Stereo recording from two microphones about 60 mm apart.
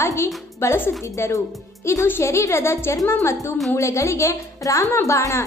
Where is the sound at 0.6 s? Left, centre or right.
Left.